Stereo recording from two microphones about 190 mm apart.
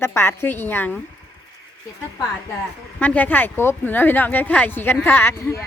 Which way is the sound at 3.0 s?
10° left (ahead or behind).